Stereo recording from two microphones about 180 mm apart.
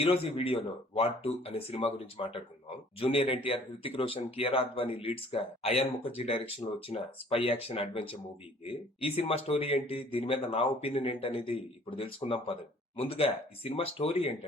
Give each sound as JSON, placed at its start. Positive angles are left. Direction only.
{"t": 0.0, "sound": "speech", "side_deg": 30}